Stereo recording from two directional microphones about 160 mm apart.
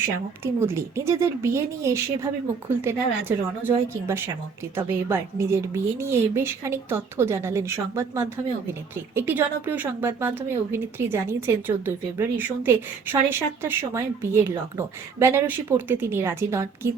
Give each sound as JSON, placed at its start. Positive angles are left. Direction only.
{"t": 0.4, "sound": "a woman's voice", "side_deg": -15}